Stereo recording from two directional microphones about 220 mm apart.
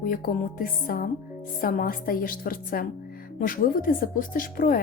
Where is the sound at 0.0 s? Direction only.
40° left (ahead or behind).